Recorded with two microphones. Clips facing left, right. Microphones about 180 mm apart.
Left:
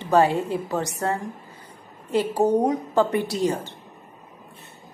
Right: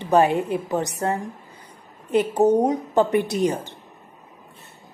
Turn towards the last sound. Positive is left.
turn(degrees=-15)  # may be behind; listen again after turning